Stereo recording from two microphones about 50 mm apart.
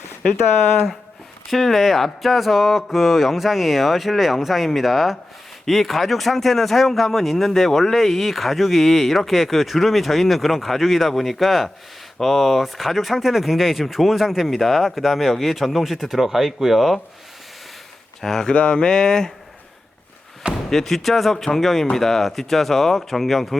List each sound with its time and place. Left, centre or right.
1.5 s speech: centre
18.2 s speech: centre
18.4 s speech: centre
20.5 s speech: centre